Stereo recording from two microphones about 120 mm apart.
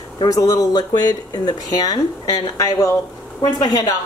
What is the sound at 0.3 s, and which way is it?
Speech, 30° left (ahead or behind).